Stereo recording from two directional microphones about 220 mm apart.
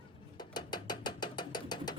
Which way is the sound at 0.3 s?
20° left (ahead or behind).